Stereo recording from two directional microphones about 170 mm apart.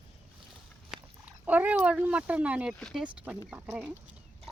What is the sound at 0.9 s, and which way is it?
Speech, 10° right (ahead or behind).